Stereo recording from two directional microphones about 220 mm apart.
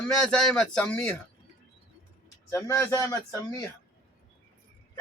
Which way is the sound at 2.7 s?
15° left (ahead or behind).